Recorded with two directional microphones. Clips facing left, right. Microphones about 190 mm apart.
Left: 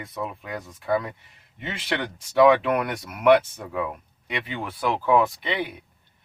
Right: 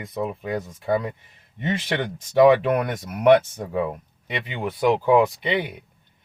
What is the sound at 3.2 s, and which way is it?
Speech, 30° right (ahead or behind).